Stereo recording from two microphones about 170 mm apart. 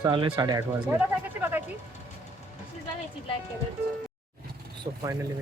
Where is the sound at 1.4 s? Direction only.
10° right (ahead or behind).